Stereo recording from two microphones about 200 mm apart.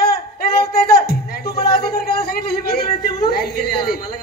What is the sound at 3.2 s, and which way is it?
Speech, 50° left (ahead or behind).